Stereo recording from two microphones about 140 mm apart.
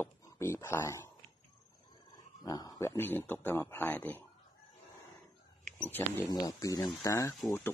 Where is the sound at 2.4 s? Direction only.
25° left (ahead or behind).